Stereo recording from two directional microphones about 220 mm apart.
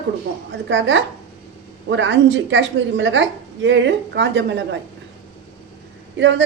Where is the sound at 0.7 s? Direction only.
55° right (ahead or behind).